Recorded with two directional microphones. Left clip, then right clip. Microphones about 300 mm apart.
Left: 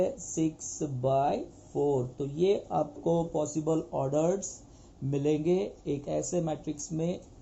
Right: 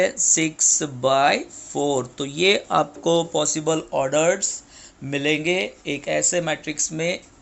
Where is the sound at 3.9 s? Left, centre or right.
Right.